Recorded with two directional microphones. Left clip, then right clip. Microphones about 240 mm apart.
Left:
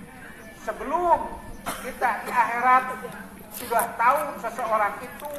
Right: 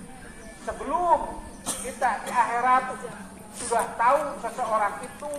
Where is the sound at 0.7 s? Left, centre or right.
Left.